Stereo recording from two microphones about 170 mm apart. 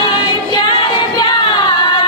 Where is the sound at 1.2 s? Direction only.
25° left (ahead or behind).